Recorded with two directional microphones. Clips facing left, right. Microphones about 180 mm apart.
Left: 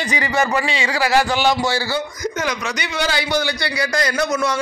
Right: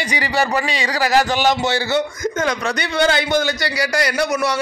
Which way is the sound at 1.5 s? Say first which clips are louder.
Right 1 dB; 20° right (ahead or behind).